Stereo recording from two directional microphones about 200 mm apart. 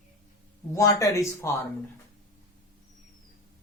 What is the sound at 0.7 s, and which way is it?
Speech, 15° left (ahead or behind).